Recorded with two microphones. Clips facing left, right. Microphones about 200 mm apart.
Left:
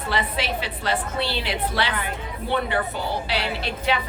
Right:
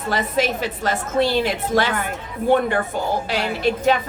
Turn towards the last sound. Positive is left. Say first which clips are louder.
# right 7 dB
turn(degrees=-45)  # may be behind; listen again after turning